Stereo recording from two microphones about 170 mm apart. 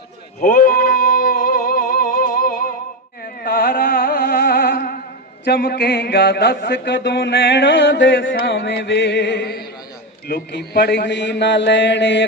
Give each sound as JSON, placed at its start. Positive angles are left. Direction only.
{"t": 0.3, "sound": "speech", "side_deg": 50}
{"t": 1.1, "sound": "music", "side_deg": 55}
{"t": 3.2, "sound": "a sound", "side_deg": 55}
{"t": 5.5, "sound": "mantra", "side_deg": 80}